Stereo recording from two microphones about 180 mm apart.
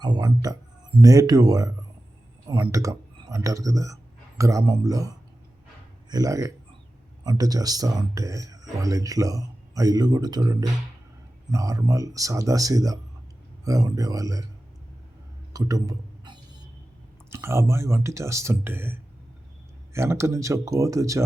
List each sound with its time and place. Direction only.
0.0 s speech: 25° right (ahead or behind)
15.5 s a sound: 20° right (ahead or behind)
17.3 s speech: 15° right (ahead or behind)